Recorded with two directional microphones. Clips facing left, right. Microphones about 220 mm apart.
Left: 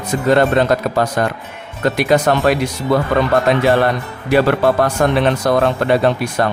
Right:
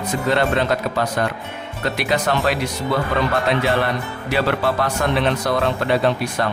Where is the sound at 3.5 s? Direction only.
45° left (ahead or behind).